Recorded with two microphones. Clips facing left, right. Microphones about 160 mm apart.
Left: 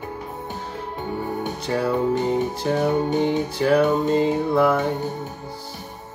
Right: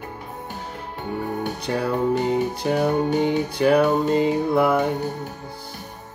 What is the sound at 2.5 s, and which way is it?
Music, 15° right (ahead or behind).